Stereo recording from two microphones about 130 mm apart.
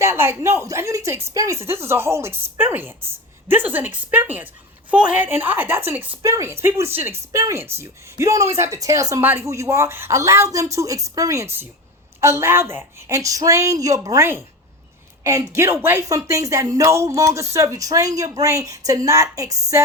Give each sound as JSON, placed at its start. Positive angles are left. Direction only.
{"t": 0.0, "sound": "a woman's voice", "side_deg": -20}